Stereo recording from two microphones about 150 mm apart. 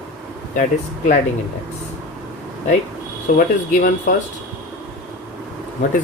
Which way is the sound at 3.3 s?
65° left (ahead or behind).